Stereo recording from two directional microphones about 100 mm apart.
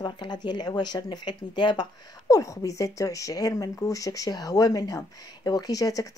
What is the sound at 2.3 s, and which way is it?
Speech, 35° left (ahead or behind).